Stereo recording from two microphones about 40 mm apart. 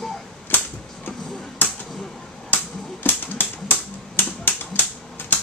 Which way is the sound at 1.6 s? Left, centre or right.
Left.